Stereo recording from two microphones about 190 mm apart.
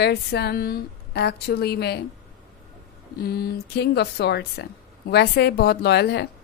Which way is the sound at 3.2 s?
55° left (ahead or behind).